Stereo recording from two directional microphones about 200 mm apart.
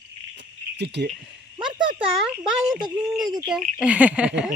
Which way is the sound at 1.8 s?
25° right (ahead or behind).